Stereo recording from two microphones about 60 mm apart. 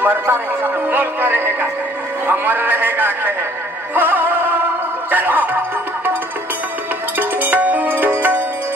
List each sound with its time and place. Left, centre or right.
0.0 s music: right
2.2 s a sound: right
3.9 s music: right
7.2 s music: right